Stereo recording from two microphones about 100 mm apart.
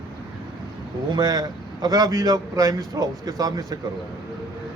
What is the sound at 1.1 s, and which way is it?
A man's voice, 40° right (ahead or behind).